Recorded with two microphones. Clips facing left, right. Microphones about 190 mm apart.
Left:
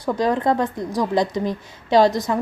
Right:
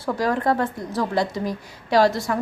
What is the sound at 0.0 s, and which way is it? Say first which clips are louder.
A woman's voice: left 2 dB; 20° left (ahead or behind).